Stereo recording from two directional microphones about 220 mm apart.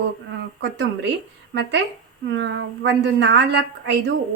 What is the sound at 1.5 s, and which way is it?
A woman's voice, 55° right (ahead or behind).